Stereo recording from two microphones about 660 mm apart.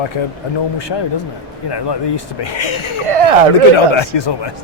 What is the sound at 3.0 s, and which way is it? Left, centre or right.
Speech, right.